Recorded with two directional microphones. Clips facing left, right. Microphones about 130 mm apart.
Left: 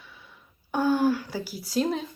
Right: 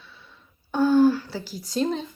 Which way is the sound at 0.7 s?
10° left (ahead or behind).